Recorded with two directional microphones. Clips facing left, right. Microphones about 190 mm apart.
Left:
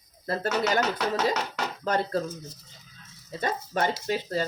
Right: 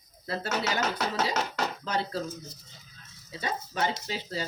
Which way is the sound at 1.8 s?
50° left (ahead or behind).